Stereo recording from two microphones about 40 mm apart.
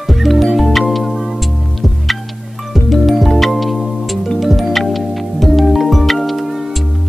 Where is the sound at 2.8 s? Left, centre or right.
Centre.